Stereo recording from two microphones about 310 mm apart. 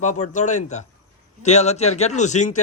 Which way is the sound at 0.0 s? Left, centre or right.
Left.